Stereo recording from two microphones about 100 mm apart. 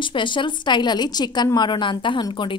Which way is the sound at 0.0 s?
55° left (ahead or behind).